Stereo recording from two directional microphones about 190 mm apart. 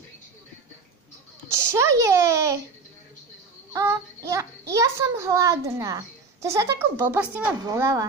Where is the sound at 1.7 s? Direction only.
15° right (ahead or behind).